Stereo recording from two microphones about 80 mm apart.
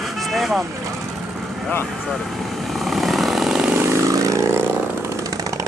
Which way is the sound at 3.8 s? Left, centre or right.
Right.